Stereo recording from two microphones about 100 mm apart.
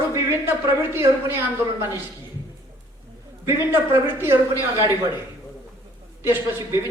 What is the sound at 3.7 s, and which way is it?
Speech, 20° right (ahead or behind).